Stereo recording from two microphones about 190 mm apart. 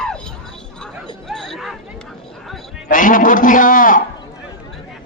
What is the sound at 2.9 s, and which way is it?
A man's voice, 45° left (ahead or behind).